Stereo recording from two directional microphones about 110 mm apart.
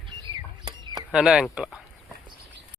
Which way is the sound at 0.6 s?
40° right (ahead or behind).